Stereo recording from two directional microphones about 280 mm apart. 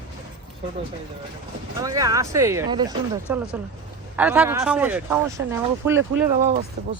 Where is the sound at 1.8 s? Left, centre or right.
Centre.